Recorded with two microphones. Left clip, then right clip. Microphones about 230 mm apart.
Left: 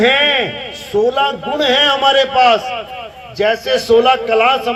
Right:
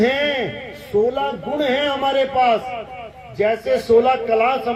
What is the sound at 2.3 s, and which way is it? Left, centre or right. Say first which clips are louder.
A man's voice: left 6 dB; left.